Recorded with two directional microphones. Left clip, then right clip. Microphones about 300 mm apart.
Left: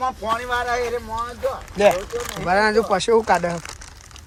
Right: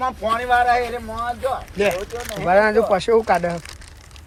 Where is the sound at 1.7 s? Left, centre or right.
Left.